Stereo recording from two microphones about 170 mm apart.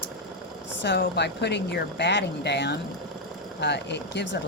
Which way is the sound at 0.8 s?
85° left.